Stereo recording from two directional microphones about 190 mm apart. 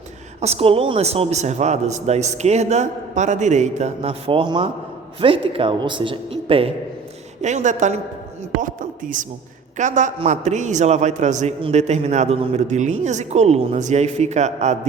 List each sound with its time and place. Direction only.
0.4 s a man's voice: 30° right (ahead or behind)